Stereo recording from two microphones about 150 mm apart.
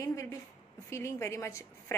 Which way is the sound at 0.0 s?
20° left (ahead or behind).